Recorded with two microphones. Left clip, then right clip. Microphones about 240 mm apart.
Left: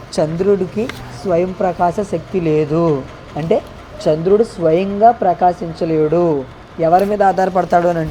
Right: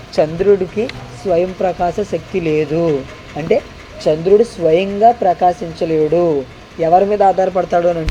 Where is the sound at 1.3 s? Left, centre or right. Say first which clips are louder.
Right 1 dB; left.